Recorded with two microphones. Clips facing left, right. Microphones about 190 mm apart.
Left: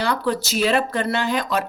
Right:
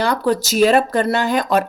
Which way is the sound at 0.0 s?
45° right (ahead or behind).